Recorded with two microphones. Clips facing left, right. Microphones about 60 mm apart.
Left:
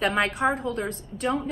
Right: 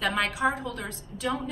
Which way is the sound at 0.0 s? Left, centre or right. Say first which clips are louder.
Left 3 dB; left.